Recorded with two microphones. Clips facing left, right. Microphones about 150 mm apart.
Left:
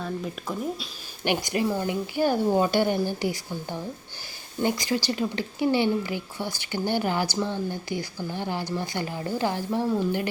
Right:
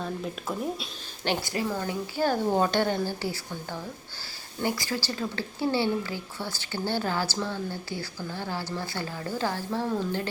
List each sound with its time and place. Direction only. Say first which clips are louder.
0.0 s speech: left 1 dB; centre (ahead or behind)
1.2 s speech: left 3 dB; 15° left (ahead or behind)